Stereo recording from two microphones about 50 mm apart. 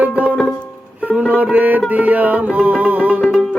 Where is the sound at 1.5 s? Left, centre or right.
Right.